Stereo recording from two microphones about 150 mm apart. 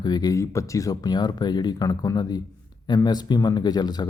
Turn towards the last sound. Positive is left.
turn(degrees=25)  # may be behind; listen again after turning